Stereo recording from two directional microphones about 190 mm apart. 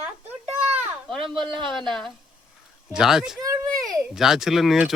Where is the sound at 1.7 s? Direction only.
Centre (ahead or behind).